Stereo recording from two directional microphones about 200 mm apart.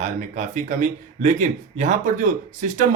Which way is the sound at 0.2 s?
35° right (ahead or behind).